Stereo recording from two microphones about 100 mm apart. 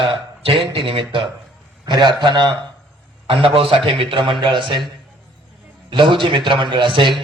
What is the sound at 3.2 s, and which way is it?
A man's voice, 60° right (ahead or behind).